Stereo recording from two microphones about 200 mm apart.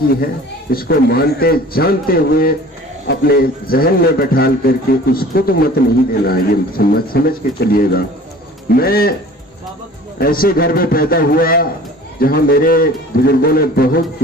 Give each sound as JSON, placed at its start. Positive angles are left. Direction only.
{"t": 0.7, "sound": "a man's voice", "side_deg": 50}
{"t": 10.2, "sound": "a man's voice", "side_deg": 45}